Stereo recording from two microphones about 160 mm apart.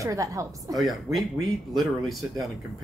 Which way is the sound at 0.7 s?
Centre (ahead or behind).